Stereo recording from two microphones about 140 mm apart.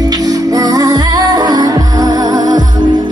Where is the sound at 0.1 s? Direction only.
25° right (ahead or behind).